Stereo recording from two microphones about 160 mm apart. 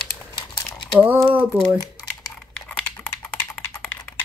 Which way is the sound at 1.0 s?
10° right (ahead or behind).